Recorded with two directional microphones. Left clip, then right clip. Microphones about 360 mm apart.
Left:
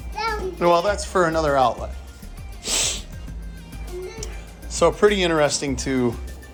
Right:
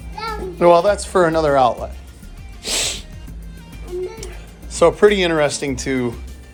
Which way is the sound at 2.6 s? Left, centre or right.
Centre.